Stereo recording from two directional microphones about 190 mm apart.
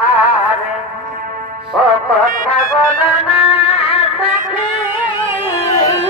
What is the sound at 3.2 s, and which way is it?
Music, 30° left (ahead or behind).